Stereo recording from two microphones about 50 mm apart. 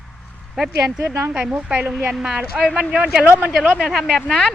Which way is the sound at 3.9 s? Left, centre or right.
Centre.